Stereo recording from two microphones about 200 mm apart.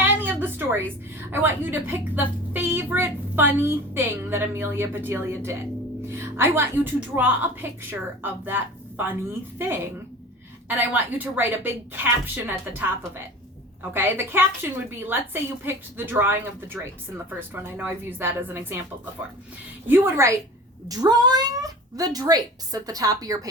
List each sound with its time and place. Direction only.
0.0 s a woman's voice: 10° right (ahead or behind)
13.9 s a woman's voice: 10° right (ahead or behind)
19.9 s a woman's voice: 10° right (ahead or behind)